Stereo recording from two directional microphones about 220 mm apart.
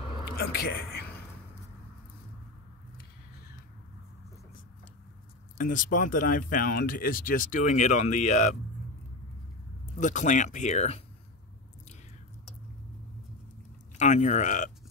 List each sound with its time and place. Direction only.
0.2 s speech: 45° left (ahead or behind)
5.6 s speech: 40° left (ahead or behind)
9.9 s speech: 35° left (ahead or behind)
13.9 s speech: 35° left (ahead or behind)